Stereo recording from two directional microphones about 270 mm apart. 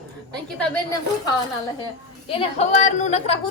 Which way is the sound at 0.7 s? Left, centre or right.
Centre.